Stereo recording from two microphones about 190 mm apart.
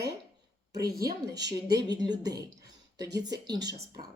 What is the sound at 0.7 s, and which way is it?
A woman's voice, 20° right (ahead or behind).